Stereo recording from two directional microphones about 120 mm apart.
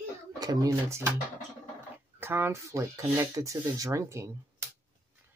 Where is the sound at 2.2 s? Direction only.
20° right (ahead or behind).